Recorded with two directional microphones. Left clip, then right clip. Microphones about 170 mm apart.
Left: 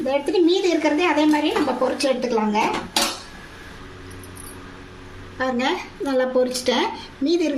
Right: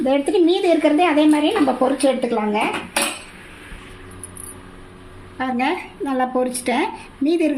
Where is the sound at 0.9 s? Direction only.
60° right (ahead or behind).